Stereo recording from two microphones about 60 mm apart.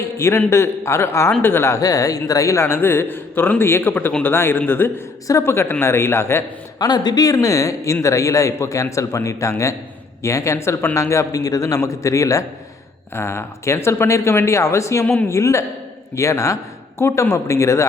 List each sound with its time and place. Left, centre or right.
0.2 s speech: left
1.8 s a man's voice: left
5.3 s speech: left
6.7 s speech: left
7.4 s a man's voice: left
13.1 s speech: left
15.0 s a woman's voice: left
15.3 s a man's voice: left